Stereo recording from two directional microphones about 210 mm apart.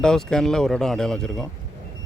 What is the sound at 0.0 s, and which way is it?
Speech, 5° left (ahead or behind).